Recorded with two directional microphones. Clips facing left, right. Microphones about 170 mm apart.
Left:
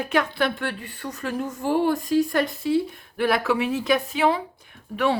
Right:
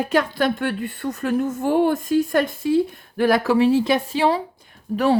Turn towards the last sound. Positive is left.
turn(degrees=-40)  # may be behind; listen again after turning